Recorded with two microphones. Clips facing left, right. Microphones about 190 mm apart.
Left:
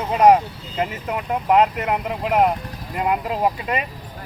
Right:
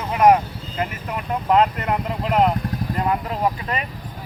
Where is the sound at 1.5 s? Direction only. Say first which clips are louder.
Left 1 dB; 10° left (ahead or behind).